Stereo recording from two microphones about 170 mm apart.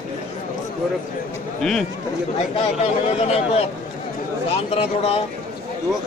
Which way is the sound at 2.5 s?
35° left (ahead or behind).